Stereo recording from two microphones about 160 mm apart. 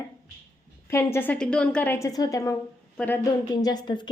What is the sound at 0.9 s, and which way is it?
A woman's voice, 15° left (ahead or behind).